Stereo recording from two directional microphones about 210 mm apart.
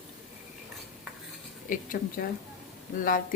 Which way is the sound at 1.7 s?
40° left (ahead or behind).